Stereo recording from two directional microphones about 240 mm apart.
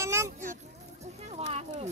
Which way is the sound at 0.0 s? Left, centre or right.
Centre.